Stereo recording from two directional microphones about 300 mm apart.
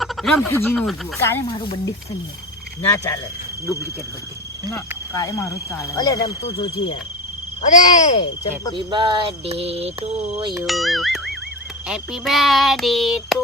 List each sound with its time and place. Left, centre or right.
0.0 s speech: centre
4.7 s speech: centre
8.7 s a sound: centre
10.5 s speech: centre